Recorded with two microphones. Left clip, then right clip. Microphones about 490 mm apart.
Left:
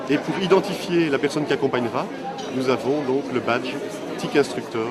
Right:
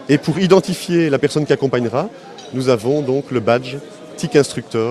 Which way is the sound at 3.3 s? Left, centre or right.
Right.